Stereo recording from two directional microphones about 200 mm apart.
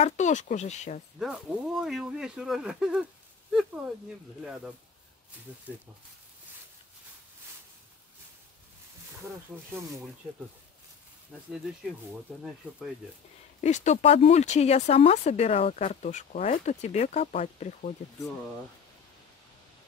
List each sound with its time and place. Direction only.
0.0 s speech: 35° left (ahead or behind)
1.2 s speech: 5° right (ahead or behind)
12.6 s speech: 5° right (ahead or behind)
13.6 s speech: 35° left (ahead or behind)